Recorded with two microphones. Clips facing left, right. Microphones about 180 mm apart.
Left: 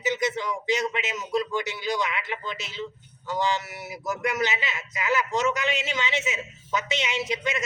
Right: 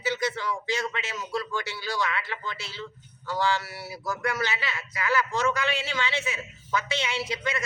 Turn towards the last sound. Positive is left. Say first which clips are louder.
# left 2 dB
turn(degrees=20)  # may be behind; listen again after turning